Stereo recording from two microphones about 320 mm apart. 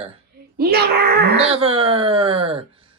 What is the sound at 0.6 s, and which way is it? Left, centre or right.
Speech, right.